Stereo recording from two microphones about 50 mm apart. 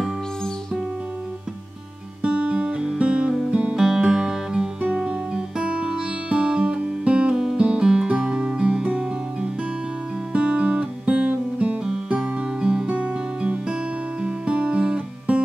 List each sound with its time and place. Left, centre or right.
2.2 s guitar: right
3.7 s music: centre
7.3 s music: centre; by 11.8 s right
12.2 s guitar: centre
13.4 s music: centre